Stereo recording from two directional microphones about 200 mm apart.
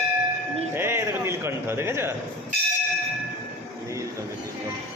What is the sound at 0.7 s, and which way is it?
Speech, 10° right (ahead or behind).